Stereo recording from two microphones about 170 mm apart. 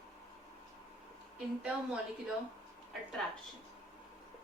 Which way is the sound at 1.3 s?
5° right (ahead or behind).